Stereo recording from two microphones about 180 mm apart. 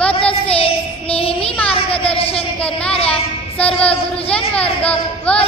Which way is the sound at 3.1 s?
5° left (ahead or behind).